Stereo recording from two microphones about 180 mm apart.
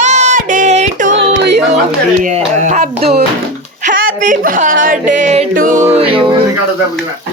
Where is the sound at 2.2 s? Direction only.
45° right (ahead or behind).